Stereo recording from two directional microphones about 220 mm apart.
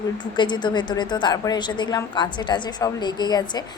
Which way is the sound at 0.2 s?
20° left (ahead or behind).